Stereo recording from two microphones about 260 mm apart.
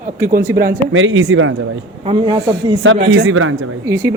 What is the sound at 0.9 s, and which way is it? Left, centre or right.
Speech, right.